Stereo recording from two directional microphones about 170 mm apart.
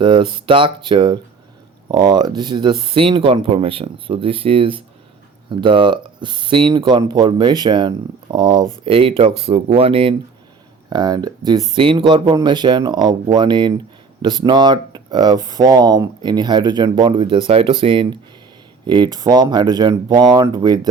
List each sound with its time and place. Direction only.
0.0 s speech: 30° right (ahead or behind)